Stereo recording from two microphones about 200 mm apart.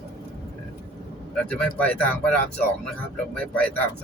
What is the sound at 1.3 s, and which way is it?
Speech, 5° left (ahead or behind).